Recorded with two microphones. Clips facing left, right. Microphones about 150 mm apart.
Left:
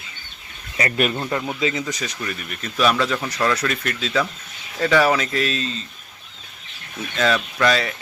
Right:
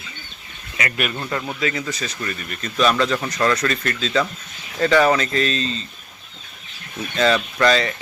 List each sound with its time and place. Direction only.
0.8 s speech: 30° left (ahead or behind)
1.1 s speech: 15° left (ahead or behind)
7.2 s speech: centre (ahead or behind)